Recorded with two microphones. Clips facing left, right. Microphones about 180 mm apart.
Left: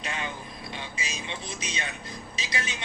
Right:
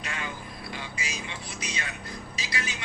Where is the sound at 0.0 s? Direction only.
25° left (ahead or behind).